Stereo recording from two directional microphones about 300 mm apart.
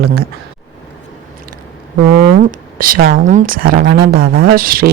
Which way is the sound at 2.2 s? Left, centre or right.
Right.